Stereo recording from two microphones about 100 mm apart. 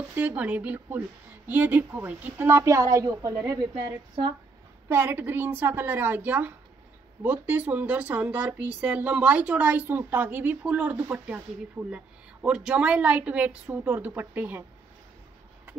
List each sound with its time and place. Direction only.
0.1 s a woman's voice: 20° right (ahead or behind); by 3.3 s 35° right (ahead or behind)
4.8 s a woman's voice: 20° right (ahead or behind)